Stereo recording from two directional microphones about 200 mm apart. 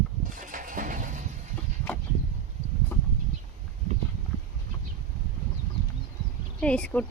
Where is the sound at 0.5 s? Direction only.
40° right (ahead or behind).